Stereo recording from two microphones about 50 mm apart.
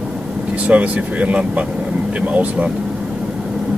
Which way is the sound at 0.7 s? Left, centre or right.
Right.